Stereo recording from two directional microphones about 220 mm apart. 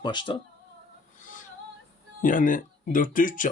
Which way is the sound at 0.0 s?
20° left (ahead or behind).